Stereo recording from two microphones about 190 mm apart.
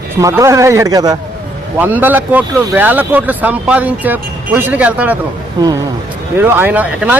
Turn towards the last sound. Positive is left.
turn(degrees=-5)  # may be behind; listen again after turning